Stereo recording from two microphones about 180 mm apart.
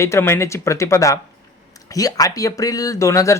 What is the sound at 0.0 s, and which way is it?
Speech, 15° left (ahead or behind).